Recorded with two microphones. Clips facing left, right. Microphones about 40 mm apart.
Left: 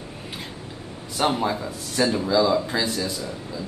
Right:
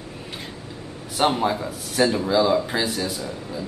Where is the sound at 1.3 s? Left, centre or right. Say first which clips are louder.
Right 2 dB; centre.